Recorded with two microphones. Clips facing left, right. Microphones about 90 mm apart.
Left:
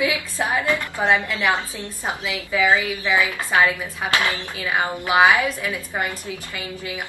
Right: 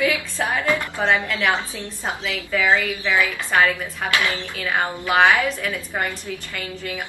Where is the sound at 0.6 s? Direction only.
20° right (ahead or behind).